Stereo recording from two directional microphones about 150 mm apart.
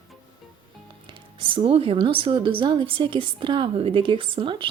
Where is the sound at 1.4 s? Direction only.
35° right (ahead or behind).